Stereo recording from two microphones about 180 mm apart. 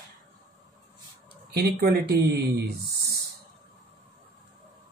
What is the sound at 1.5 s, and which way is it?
Speech, 60° right (ahead or behind).